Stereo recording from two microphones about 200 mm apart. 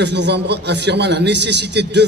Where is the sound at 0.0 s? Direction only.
60° right (ahead or behind).